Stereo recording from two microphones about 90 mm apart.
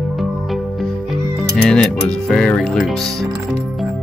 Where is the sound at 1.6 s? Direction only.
10° left (ahead or behind).